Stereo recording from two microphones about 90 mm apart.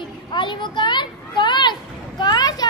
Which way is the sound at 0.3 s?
60° left (ahead or behind).